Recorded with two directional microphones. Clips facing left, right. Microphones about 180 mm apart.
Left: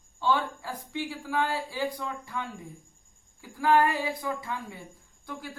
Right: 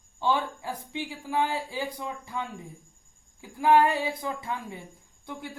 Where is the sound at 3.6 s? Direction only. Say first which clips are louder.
Right 2 dB; 20° right (ahead or behind).